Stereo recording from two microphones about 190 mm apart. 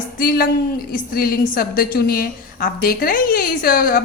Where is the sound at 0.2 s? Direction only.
50° left (ahead or behind).